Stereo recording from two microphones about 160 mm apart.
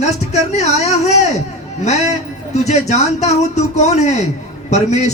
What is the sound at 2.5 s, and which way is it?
A man's voice, 45° left (ahead or behind).